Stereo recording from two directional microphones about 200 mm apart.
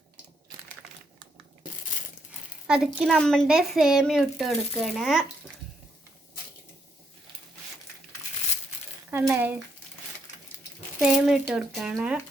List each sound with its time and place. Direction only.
2.6 s a woman's voice: 5° right (ahead or behind)
9.0 s speech: 10° right (ahead or behind)
11.3 s a woman's voice: centre (ahead or behind)